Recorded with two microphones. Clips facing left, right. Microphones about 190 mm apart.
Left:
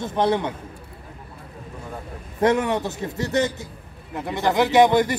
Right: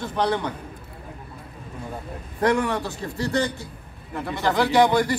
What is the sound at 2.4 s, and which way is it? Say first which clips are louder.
A man's voice: left 2 dB; 20° left (ahead or behind).